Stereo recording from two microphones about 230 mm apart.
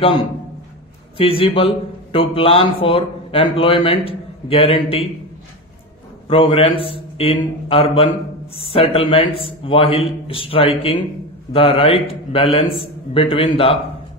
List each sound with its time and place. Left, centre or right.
1.1 s speech: left
6.2 s speech: left